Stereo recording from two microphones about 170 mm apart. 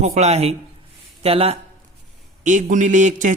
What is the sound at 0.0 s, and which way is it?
A man's voice, 40° right (ahead or behind).